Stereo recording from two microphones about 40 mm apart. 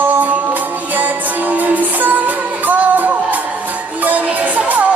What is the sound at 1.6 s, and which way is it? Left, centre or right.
Music, right.